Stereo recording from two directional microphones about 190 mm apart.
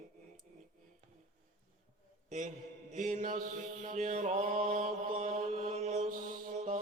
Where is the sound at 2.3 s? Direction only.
40° right (ahead or behind).